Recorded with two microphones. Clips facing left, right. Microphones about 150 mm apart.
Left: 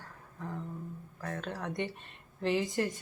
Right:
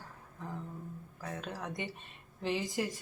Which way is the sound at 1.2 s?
5° right (ahead or behind).